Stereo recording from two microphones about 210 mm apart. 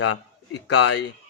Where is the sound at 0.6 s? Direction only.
55° left (ahead or behind).